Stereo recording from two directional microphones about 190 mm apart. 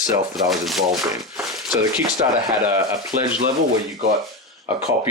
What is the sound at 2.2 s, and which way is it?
Speech, 20° right (ahead or behind).